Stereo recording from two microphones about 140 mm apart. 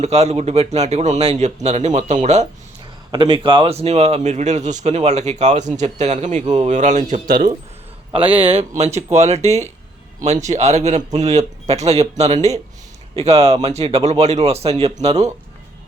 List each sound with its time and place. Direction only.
0.0 s speech: 50° right (ahead or behind)
3.1 s speech: 30° right (ahead or behind); by 7.2 s 60° right (ahead or behind)
8.1 s a man's voice: 40° right (ahead or behind)